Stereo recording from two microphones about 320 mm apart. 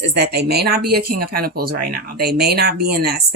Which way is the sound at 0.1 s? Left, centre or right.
Right.